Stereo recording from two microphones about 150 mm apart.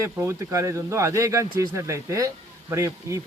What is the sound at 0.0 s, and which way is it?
A man's voice, 20° right (ahead or behind).